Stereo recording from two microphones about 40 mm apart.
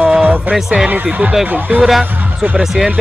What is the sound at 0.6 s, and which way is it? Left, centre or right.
Speech, centre.